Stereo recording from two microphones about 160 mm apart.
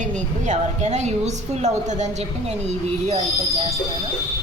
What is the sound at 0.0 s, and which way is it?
A woman's voice, 50° right (ahead or behind).